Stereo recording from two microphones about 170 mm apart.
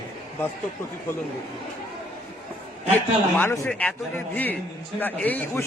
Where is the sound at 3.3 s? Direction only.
15° left (ahead or behind).